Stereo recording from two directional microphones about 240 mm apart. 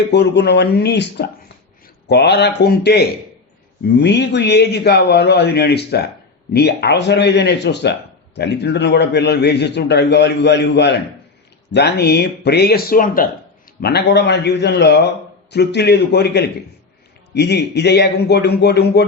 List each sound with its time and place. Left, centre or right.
0.1 s a man's voice: left